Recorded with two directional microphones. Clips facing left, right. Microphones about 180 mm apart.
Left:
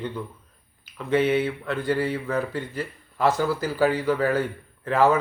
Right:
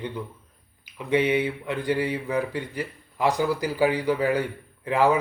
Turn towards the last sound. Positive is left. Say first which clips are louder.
# left 1 dB
turn(degrees=-15)  # may be behind; listen again after turning